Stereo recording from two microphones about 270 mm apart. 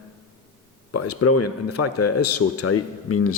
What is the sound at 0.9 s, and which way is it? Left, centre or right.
Speech, left.